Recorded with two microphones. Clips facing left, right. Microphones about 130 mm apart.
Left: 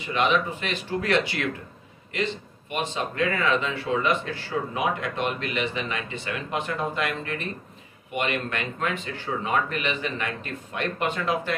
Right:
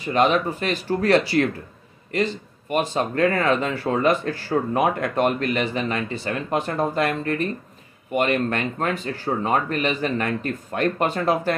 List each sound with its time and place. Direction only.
0.0 s speech: 40° right (ahead or behind)